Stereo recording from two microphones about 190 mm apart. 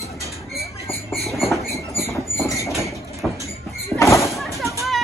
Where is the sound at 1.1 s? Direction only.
Centre (ahead or behind).